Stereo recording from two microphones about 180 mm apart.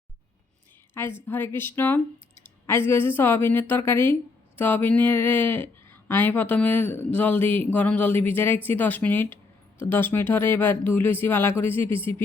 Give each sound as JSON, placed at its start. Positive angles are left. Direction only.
{"t": 0.9, "sound": "a woman's voice", "side_deg": 15}